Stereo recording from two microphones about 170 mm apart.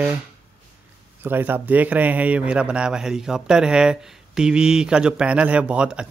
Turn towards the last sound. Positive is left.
turn(degrees=-5)  # may be behind; listen again after turning